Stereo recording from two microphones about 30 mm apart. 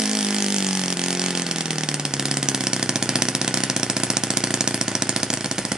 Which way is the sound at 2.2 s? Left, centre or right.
Right.